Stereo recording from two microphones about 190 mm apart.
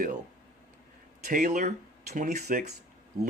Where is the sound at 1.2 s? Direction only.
45° right (ahead or behind).